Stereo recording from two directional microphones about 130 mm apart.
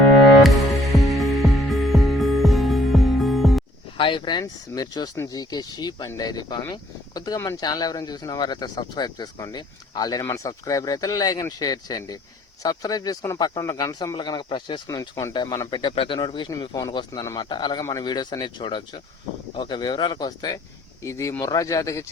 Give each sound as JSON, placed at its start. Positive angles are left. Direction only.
{"t": 0.4, "sound": "music", "side_deg": 0}
{"t": 3.9, "sound": "speech", "side_deg": 40}
{"t": 14.8, "sound": "speech", "side_deg": 25}
{"t": 17.3, "sound": "speech", "side_deg": 35}